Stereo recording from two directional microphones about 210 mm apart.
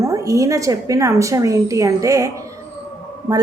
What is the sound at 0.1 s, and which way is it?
A man's voice, 15° right (ahead or behind).